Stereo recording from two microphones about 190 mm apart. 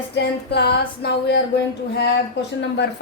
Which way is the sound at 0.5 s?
60° left (ahead or behind).